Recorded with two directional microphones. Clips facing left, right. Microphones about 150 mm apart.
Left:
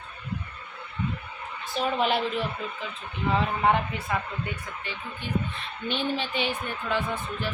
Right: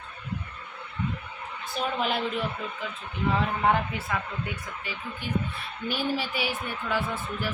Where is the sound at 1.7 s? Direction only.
Centre (ahead or behind).